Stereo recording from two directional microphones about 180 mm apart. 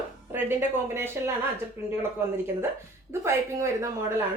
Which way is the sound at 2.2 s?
15° right (ahead or behind).